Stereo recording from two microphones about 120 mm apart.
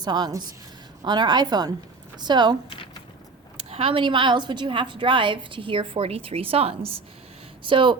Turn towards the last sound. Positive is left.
turn(degrees=-45)  # may be behind; listen again after turning